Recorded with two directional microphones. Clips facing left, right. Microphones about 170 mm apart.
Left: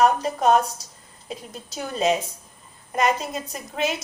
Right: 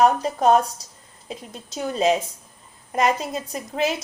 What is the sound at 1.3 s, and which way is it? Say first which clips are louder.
Speech: even; 25° right (ahead or behind).